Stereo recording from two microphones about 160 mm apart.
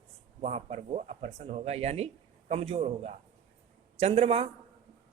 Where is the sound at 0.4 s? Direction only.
45° right (ahead or behind).